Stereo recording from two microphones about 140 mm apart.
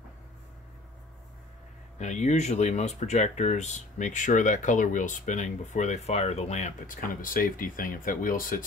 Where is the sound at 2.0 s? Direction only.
55° left (ahead or behind); by 8.6 s 80° left.